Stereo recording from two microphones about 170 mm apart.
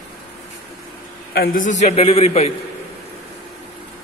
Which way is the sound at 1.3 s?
60° left (ahead or behind).